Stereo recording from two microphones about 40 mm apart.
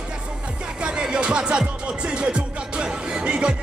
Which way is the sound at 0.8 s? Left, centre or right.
Right.